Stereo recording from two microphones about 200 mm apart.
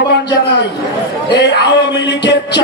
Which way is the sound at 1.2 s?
55° left (ahead or behind).